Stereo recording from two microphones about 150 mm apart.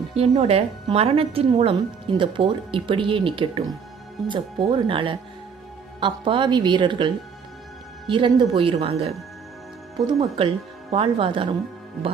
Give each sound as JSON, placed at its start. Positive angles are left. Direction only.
{"t": 0.1, "sound": "a woman's voice", "side_deg": -40}
{"t": 10.2, "sound": "a woman's voice", "side_deg": -40}